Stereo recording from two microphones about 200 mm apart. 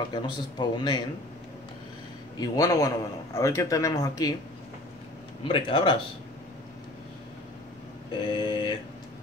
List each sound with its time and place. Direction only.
0.1 s speech: 20° left (ahead or behind)
2.3 s speech: 20° left (ahead or behind)
5.4 s speech: 25° left (ahead or behind)
8.1 s speech: 25° left (ahead or behind)